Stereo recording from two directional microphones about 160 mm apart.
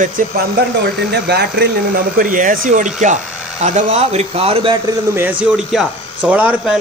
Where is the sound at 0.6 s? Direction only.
90° right; by 2.9 s 60° right (ahead or behind).